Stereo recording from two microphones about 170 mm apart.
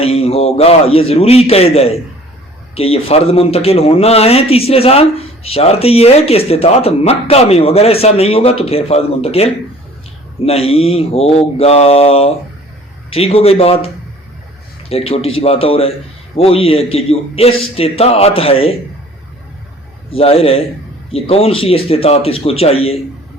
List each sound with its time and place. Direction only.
0.0 s a man's voice: 35° left (ahead or behind)
20.1 s a man's voice: 35° left (ahead or behind)